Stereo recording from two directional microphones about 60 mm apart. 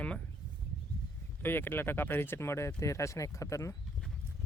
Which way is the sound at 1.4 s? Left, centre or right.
Left.